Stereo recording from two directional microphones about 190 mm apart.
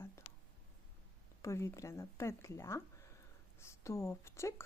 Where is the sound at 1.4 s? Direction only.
15° left (ahead or behind).